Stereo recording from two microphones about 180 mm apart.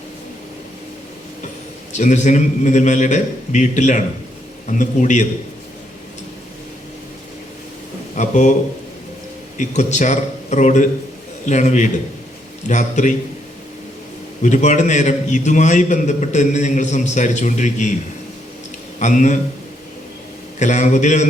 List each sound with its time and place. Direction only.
1.9 s a man's voice: 40° left (ahead or behind)
8.1 s a man's voice: 45° left (ahead or behind)
9.6 s a man's voice: 45° left (ahead or behind)
14.4 s a man's voice: 40° left (ahead or behind)
18.9 s a man's voice: 45° left (ahead or behind)
20.6 s speech: 40° left (ahead or behind)